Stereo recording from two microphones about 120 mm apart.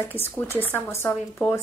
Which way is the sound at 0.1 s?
20° left (ahead or behind).